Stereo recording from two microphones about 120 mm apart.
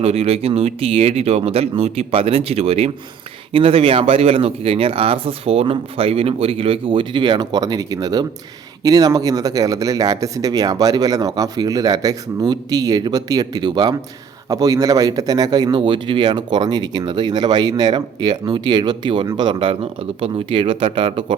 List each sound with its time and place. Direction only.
0.0 s a man's voice: 60° right (ahead or behind)